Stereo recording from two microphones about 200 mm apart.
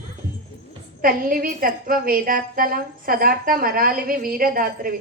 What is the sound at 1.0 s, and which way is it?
A woman's voice, 45° right (ahead or behind).